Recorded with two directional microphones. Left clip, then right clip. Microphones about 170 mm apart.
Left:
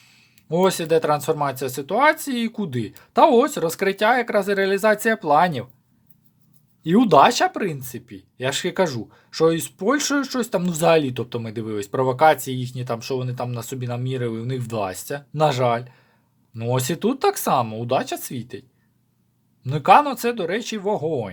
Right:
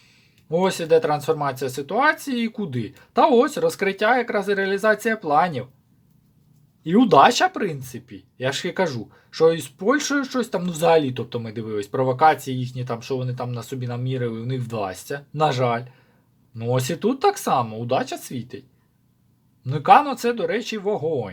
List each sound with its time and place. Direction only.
0.4 s speech: 30° left (ahead or behind)
6.8 s speech: 30° left (ahead or behind)
19.6 s speech: 30° left (ahead or behind)